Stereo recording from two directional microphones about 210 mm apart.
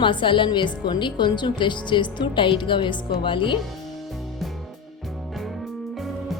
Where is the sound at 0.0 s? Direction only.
25° left (ahead or behind).